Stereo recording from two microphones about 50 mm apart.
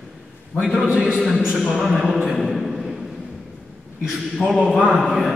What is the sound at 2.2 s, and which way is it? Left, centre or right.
Speech, centre.